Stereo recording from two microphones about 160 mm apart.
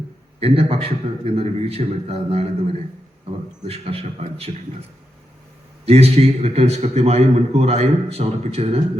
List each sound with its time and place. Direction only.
0.3 s a man's voice: 35° right (ahead or behind)
3.6 s a man's voice: 40° right (ahead or behind)
5.8 s a man's voice: 40° right (ahead or behind)